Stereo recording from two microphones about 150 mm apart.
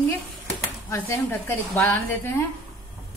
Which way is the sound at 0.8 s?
15° left (ahead or behind).